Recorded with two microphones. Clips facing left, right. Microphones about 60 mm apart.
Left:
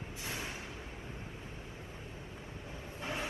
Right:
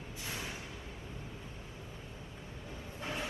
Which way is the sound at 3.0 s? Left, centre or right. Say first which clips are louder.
Left 1 dB; left.